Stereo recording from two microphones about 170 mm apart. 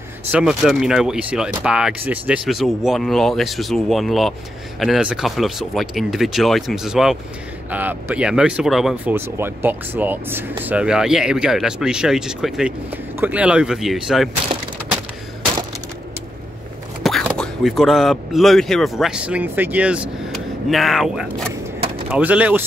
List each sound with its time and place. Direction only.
0.3 s speech: 5° right (ahead or behind)
9.1 s speech: 15° right (ahead or behind)
17.0 s speech: centre (ahead or behind)